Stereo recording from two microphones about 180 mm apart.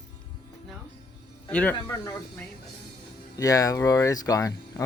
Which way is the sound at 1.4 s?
10° left (ahead or behind).